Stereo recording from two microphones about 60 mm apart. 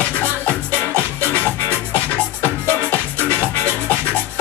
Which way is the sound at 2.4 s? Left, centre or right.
Left.